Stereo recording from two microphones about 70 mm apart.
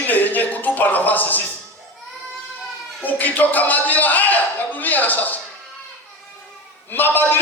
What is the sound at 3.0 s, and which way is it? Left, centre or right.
Speech, left.